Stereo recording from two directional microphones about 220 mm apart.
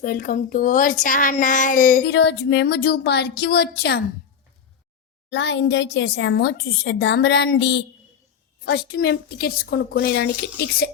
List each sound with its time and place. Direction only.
0.0 s speech: 40° left (ahead or behind)
2.0 s a woman's voice: 50° left (ahead or behind)
5.3 s a woman's voice: 55° left (ahead or behind)